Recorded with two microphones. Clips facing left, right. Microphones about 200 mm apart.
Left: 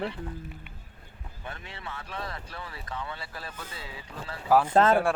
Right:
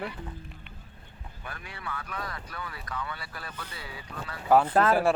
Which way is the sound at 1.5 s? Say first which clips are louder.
Even; 25° left (ahead or behind).